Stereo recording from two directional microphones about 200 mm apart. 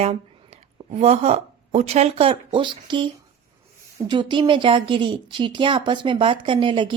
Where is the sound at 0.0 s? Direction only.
30° right (ahead or behind).